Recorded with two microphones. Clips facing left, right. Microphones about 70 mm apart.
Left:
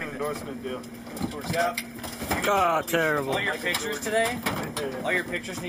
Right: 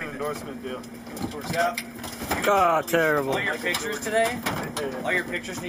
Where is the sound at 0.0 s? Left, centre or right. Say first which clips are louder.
Even; centre.